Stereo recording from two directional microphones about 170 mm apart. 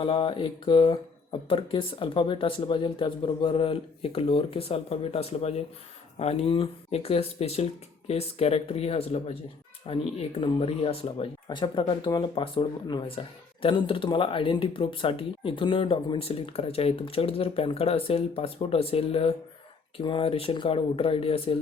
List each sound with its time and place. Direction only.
0.0 s speech: 30° left (ahead or behind)